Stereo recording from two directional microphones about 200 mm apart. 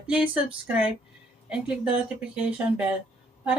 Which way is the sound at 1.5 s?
5° right (ahead or behind).